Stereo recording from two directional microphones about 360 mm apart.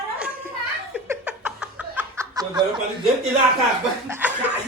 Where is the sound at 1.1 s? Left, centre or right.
Centre.